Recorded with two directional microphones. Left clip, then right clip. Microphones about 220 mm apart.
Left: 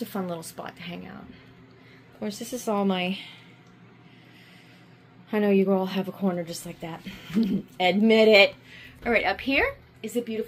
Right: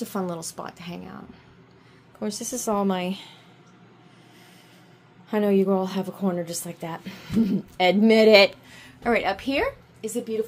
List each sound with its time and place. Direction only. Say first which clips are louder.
0.0 s a woman's voice: right 2 dB; 15° right (ahead or behind)
2.1 s a woman's voice: right 3 dB; 10° right (ahead or behind)
5.3 s a woman's voice: right 1 dB; 10° right (ahead or behind)